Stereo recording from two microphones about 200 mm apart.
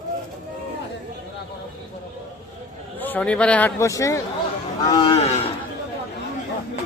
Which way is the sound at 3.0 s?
10° left (ahead or behind).